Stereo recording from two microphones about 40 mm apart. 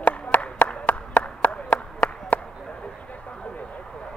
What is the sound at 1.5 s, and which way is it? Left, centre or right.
Clapping, left.